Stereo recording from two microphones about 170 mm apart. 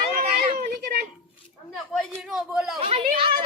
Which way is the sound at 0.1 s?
55° right (ahead or behind).